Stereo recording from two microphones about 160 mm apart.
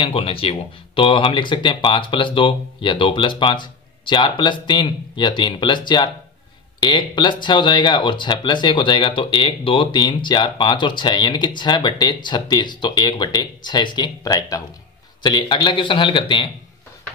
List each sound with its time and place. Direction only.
0.0 s speech: 35° left (ahead or behind)